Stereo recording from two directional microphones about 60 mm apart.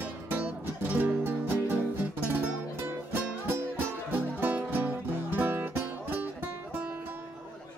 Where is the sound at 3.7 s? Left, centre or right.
Right.